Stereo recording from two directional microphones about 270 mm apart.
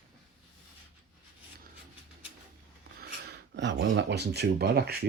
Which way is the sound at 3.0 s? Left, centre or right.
Right.